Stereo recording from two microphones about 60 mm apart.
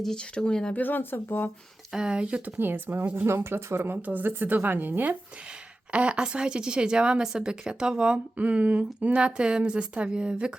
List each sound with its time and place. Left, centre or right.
0.0 s speech: centre
0.7 s speech: left
1.9 s a woman's voice: centre
2.6 s a woman's voice: right
3.9 s a woman's voice: right
5.9 s a woman's voice: centre